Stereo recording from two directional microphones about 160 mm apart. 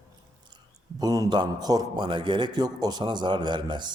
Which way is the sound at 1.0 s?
25° right (ahead or behind).